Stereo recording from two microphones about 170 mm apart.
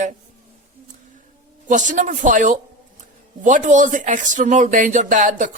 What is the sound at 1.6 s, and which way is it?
A man's voice, 50° right (ahead or behind).